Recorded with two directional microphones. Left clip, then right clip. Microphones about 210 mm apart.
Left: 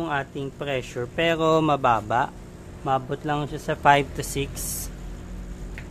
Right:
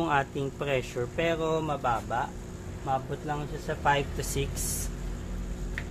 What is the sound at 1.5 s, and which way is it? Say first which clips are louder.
A man's voice: left 9 dB; 45° left (ahead or behind).